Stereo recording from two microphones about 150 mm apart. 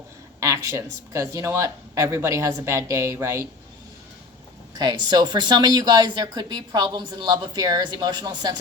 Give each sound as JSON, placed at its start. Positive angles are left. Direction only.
{"t": 0.3, "sound": "speech", "side_deg": -20}
{"t": 4.8, "sound": "speech", "side_deg": -30}